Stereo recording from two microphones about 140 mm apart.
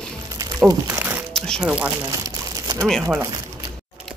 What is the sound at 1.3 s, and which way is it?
Music, 5° left (ahead or behind).